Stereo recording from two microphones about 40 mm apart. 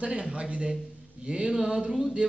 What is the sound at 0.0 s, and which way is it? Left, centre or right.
A man's voice, right.